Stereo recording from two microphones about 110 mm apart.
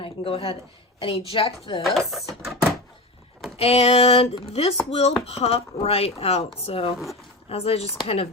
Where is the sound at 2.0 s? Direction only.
Centre (ahead or behind).